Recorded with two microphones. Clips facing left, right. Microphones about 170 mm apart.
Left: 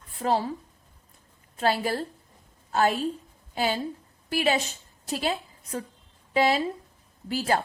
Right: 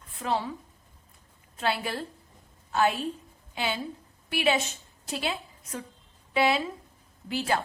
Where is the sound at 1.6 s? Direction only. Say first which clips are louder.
Left 4 dB; 40° left (ahead or behind).